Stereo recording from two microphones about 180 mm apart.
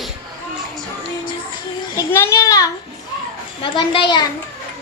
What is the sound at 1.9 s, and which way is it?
A child's voice, 15° left (ahead or behind).